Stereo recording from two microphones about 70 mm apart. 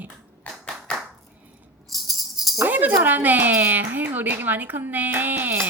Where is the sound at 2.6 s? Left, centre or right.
Right.